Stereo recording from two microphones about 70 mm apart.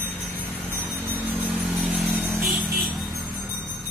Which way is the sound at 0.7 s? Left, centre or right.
Right.